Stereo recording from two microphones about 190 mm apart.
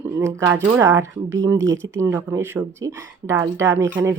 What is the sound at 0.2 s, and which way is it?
Speech, 15° right (ahead or behind).